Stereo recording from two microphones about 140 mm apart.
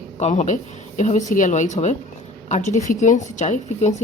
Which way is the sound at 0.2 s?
55° left (ahead or behind).